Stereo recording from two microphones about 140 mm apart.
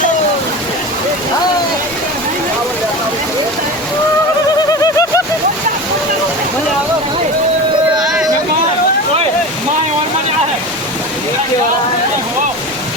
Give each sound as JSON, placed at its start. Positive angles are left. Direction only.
{"t": 4.7, "sound": "bird", "side_deg": 25}